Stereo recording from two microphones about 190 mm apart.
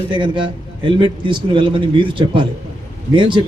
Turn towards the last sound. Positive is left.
turn(degrees=-25)  # may be behind; listen again after turning